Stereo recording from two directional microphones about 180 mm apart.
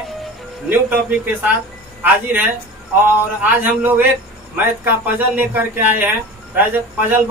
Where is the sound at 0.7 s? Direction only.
10° right (ahead or behind).